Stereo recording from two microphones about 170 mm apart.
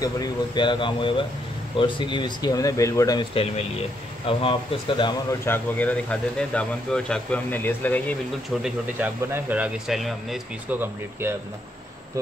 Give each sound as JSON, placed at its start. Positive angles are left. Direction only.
{"t": 0.0, "sound": "speech", "side_deg": 25}
{"t": 5.4, "sound": "speech", "side_deg": 10}
{"t": 8.6, "sound": "speech", "side_deg": -10}
{"t": 10.8, "sound": "speech", "side_deg": -15}